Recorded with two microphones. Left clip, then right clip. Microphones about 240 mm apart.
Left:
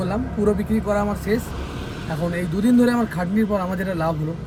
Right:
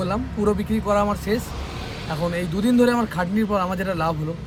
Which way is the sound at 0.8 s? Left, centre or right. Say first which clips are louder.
Right 3 dB; right.